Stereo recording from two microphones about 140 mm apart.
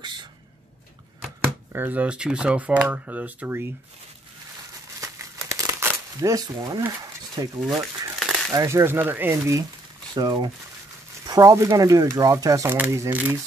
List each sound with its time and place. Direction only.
0.0 s a sound: 35° right (ahead or behind)
1.7 s speech: 15° right (ahead or behind)
5.0 s crumpling: 20° right (ahead or behind)
7.4 s speech: 30° right (ahead or behind)
8.2 s crumpling: 5° right (ahead or behind)
8.5 s speech: 20° right (ahead or behind)